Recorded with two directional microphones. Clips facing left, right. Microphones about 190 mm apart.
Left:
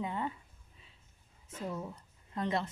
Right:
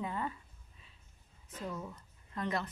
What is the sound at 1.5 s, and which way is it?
A woman's voice, 25° left (ahead or behind).